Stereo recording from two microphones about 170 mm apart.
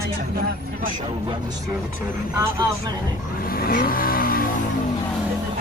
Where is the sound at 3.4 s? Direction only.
60° left (ahead or behind).